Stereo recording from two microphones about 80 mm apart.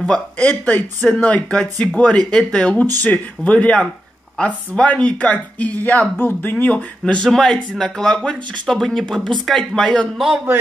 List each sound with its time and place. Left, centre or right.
0.0 s speech: centre
10.1 s speech: centre